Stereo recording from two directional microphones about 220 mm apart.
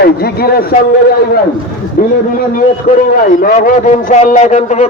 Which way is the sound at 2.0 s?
40° left (ahead or behind).